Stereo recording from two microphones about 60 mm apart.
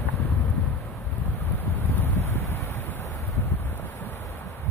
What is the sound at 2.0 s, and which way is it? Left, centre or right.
Wind, left.